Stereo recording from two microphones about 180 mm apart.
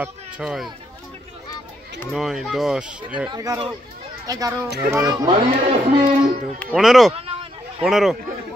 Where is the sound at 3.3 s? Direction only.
20° right (ahead or behind).